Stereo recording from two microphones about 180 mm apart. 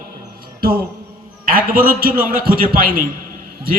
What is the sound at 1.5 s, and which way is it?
A man's voice, 50° right (ahead or behind).